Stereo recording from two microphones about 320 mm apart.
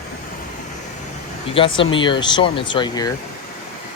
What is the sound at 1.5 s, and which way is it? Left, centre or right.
Speech, centre.